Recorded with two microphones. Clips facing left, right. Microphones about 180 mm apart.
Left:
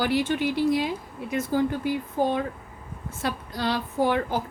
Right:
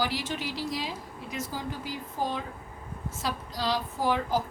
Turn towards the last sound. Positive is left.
turn(degrees=60)  # may be behind; listen again after turning